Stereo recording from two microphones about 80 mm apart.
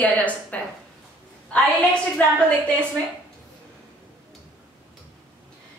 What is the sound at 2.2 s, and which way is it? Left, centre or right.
Speech, centre.